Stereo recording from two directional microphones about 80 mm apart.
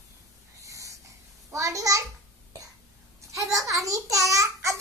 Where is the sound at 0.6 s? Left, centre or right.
Right.